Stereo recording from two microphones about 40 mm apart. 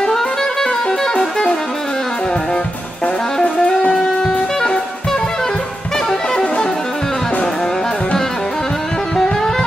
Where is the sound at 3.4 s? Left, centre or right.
Centre.